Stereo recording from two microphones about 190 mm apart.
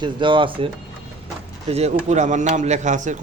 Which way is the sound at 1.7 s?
35° right (ahead or behind).